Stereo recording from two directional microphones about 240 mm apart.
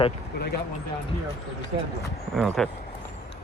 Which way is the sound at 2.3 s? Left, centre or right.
Centre.